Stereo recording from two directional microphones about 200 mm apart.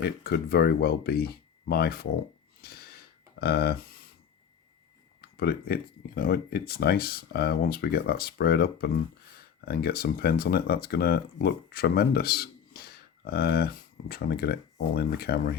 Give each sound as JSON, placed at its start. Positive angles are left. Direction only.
{"t": 0.0, "sound": "speech", "side_deg": 50}
{"t": 2.6, "sound": "a sound", "side_deg": 50}
{"t": 5.2, "sound": "speech", "side_deg": 50}